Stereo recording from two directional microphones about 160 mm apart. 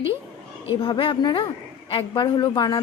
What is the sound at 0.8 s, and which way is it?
A woman's voice, 30° left (ahead or behind).